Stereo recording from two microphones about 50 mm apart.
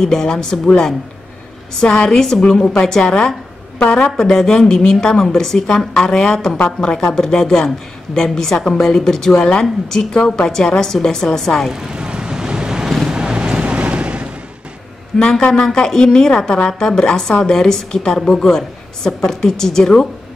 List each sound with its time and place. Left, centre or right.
0.0 s speech: centre
11.7 s vehicle: centre
13.1 s a sound: centre
15.1 s speech: centre